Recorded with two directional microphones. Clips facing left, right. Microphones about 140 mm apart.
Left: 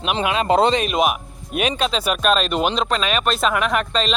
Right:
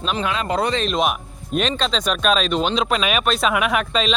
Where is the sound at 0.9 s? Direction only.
5° left (ahead or behind).